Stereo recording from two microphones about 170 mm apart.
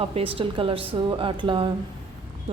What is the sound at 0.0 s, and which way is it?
A woman's voice, 35° right (ahead or behind).